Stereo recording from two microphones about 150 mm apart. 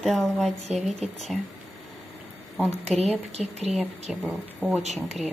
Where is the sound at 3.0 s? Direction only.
45° right (ahead or behind).